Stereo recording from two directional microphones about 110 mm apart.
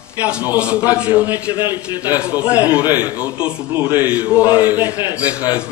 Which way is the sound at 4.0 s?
15° right (ahead or behind).